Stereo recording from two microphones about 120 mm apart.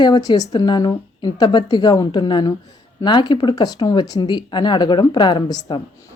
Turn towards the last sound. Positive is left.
turn(degrees=35)  # may be behind; listen again after turning